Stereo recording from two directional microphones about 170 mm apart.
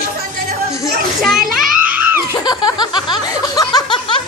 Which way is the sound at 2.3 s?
25° left (ahead or behind).